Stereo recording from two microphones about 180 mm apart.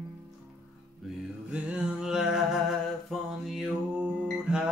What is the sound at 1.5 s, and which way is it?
Music, 5° right (ahead or behind).